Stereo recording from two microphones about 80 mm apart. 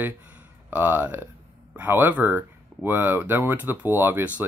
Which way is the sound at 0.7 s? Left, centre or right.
Right.